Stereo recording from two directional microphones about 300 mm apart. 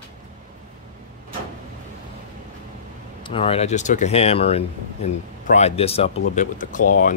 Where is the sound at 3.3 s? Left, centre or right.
Centre.